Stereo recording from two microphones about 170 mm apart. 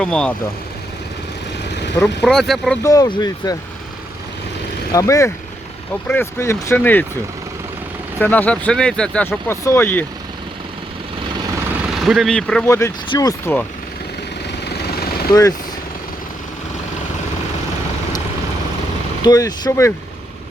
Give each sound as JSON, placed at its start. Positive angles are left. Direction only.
{"t": 0.0, "sound": "speech", "side_deg": 5}
{"t": 2.2, "sound": "speech", "side_deg": 0}
{"t": 2.8, "sound": "speech", "side_deg": 20}
{"t": 4.9, "sound": "speech", "side_deg": 20}
{"t": 8.2, "sound": "speech", "side_deg": 10}
{"t": 11.9, "sound": "speech", "side_deg": 0}
{"t": 12.6, "sound": "speech", "side_deg": 15}
{"t": 14.6, "sound": "a sound", "side_deg": 70}
{"t": 15.3, "sound": "speech", "side_deg": 20}
{"t": 19.2, "sound": "speech", "side_deg": 25}